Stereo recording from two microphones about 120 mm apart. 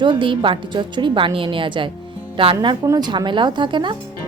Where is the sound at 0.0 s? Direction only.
45° right (ahead or behind).